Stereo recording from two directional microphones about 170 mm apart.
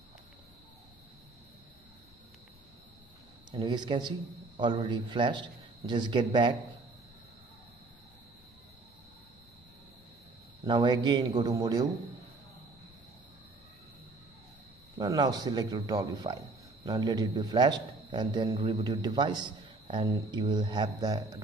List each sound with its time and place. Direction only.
3.5 s a man's voice: 25° right (ahead or behind)
10.6 s a man's voice: 25° right (ahead or behind)
15.0 s a man's voice: 25° right (ahead or behind)